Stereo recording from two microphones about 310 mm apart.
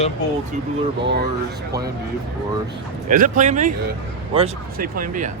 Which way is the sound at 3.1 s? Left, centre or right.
Right.